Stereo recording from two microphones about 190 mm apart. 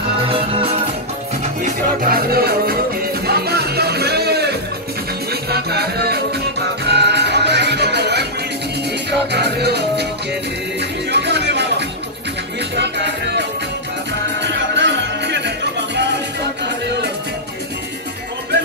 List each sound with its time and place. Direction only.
0.2 s music: 30° right (ahead or behind)
1.4 s music: 45° right (ahead or behind); by 8.3 s 60° right (ahead or behind)
9.3 s music: 60° right (ahead or behind)